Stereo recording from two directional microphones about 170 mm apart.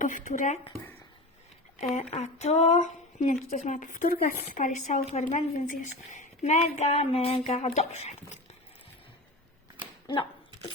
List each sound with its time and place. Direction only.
0.0 s speech: 50° left (ahead or behind)
2.0 s speech: 40° left (ahead or behind)